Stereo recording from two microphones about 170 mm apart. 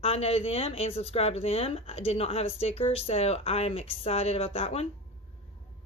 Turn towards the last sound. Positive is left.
turn(degrees=35)  # may be behind; listen again after turning